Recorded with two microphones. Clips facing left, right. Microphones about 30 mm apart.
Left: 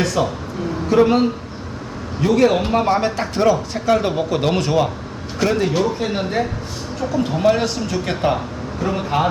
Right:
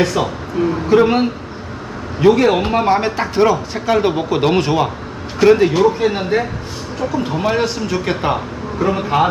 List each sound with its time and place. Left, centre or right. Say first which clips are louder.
0.0 s speech: right 2 dB; centre